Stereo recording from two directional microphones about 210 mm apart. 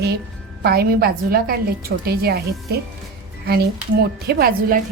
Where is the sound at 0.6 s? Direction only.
50° right (ahead or behind).